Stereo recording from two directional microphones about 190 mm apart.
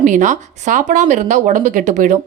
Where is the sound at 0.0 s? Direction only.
40° right (ahead or behind).